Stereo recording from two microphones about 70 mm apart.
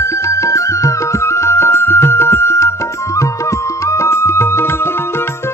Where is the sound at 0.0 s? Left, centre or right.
Left.